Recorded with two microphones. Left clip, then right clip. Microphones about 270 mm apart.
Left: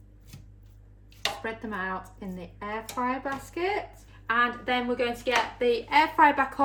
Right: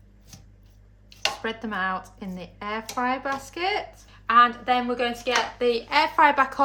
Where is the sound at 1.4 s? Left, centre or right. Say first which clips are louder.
Right 5 dB; right.